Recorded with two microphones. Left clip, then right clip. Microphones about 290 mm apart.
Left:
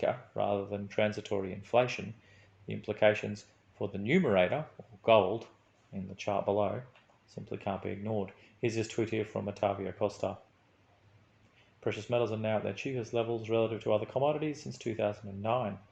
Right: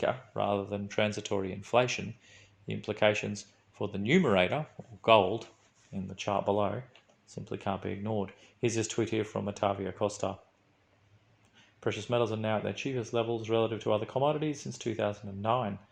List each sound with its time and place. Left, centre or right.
0.0 s speech: right
11.8 s speech: right